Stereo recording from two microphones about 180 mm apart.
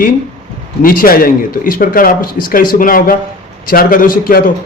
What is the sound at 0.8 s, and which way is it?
A man's voice, 55° left (ahead or behind).